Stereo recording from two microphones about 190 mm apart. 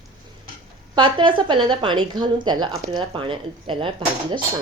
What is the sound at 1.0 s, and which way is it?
Speech, 25° right (ahead or behind).